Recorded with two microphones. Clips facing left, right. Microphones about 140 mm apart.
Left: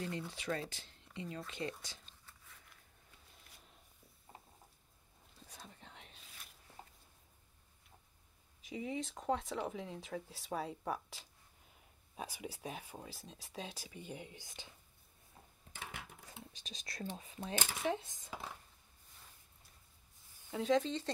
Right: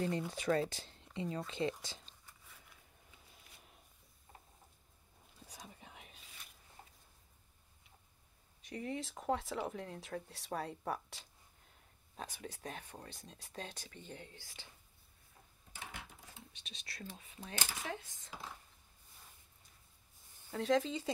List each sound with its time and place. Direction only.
0.3 s speech: 45° right (ahead or behind); by 2.0 s 25° right (ahead or behind)
2.2 s a sound: 5° right (ahead or behind)
5.4 s a sound: 10° right (ahead or behind)
8.6 s speech: centre (ahead or behind); by 14.7 s 20° left (ahead or behind)
16.5 s speech: 40° left (ahead or behind)
17.5 s speech: 20° left (ahead or behind)
20.5 s speech: centre (ahead or behind)